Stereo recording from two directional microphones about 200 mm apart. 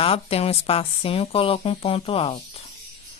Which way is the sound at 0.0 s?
30° left (ahead or behind).